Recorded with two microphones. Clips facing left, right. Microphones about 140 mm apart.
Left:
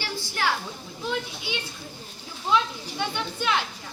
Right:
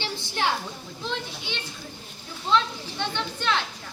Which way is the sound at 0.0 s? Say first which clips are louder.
Even; 20° right (ahead or behind).